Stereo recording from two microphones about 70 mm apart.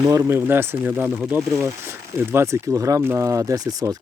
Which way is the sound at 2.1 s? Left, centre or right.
Right.